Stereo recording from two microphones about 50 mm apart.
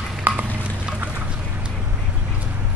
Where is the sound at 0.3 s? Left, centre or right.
Right.